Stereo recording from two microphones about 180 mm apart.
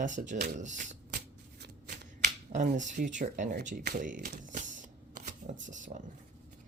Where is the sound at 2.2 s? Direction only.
45° right (ahead or behind).